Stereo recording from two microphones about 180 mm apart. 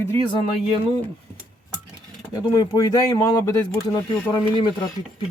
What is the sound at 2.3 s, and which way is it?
Speech, 20° left (ahead or behind).